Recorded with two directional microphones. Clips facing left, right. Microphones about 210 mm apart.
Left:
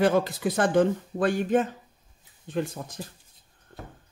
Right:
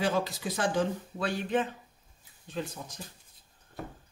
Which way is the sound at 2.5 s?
55° left (ahead or behind).